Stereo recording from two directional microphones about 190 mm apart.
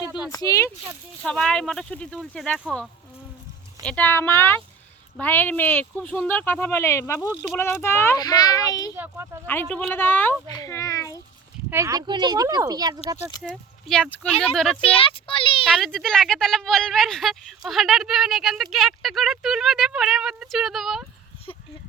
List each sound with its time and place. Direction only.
0.3 s speech: 20° left (ahead or behind)
1.2 s speech: 5° left (ahead or behind)
3.8 s speech: 10° left (ahead or behind)
9.0 s speech: 15° right (ahead or behind)
9.5 s speech: 10° left (ahead or behind)
11.7 s speech: 15° right (ahead or behind)
13.4 s speech: centre (ahead or behind)
14.8 s speech: 30° left (ahead or behind)
15.6 s speech: centre (ahead or behind)